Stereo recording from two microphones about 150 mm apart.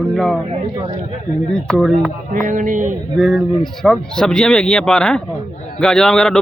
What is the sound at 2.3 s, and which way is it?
Music, 60° right (ahead or behind).